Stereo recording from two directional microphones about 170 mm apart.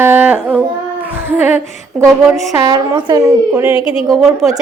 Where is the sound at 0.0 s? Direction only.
10° right (ahead or behind).